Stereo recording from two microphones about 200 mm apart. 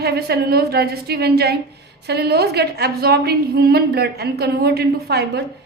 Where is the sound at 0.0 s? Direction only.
55° right (ahead or behind).